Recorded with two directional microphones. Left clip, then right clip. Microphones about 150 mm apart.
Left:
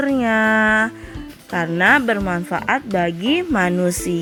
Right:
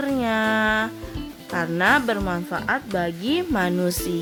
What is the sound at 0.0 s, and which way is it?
Music, 5° left (ahead or behind).